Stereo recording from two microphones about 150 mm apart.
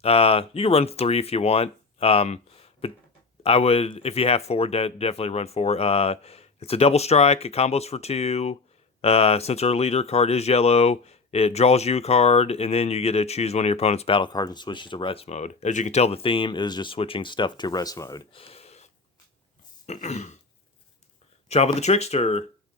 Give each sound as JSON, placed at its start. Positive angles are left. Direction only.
{"t": 0.0, "sound": "speech", "side_deg": 40}
{"t": 18.3, "sound": "a sound", "side_deg": 40}
{"t": 19.9, "sound": "speech", "side_deg": 50}
{"t": 21.5, "sound": "speech", "side_deg": 45}